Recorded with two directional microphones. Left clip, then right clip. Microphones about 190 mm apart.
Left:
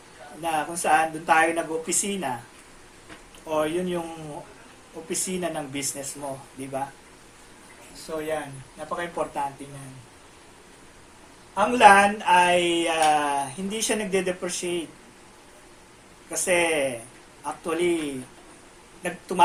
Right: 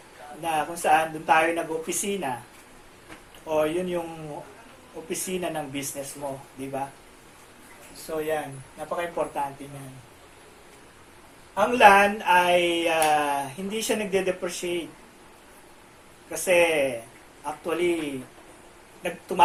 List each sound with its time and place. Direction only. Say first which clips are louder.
0.4 s speech: right 1 dB; 20° left (ahead or behind)
3.4 s speech: right 1 dB; 20° left (ahead or behind)
5.0 s speech: left 1 dB; 20° left (ahead or behind)
8.9 s speech: right 1 dB; 15° left (ahead or behind)
11.5 s speech: left 1 dB; 15° left (ahead or behind)
16.3 s speech: right 2 dB; 20° left (ahead or behind)
19.0 s speech: even; 20° left (ahead or behind)